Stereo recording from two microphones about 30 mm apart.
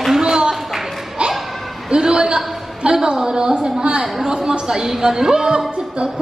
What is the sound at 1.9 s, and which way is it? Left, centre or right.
A woman's voice, right.